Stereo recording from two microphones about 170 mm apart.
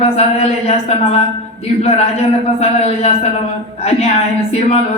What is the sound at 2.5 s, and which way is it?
A woman's voice, 40° left (ahead or behind).